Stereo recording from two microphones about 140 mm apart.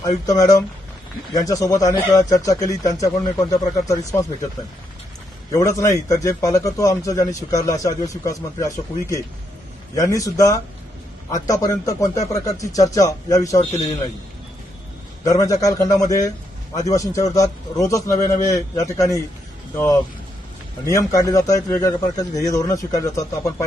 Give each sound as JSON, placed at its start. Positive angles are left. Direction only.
{"t": 0.3, "sound": "a man's voice", "side_deg": 25}
{"t": 5.5, "sound": "a man's voice", "side_deg": 25}
{"t": 15.2, "sound": "a man's voice", "side_deg": 25}